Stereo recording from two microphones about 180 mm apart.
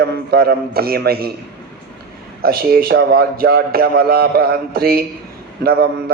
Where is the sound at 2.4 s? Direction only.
55° right (ahead or behind).